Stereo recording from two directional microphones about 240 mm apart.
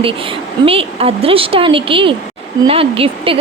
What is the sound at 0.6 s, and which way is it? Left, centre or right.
A woman's voice, right.